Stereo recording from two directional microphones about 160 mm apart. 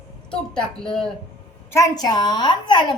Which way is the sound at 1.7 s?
20° left (ahead or behind).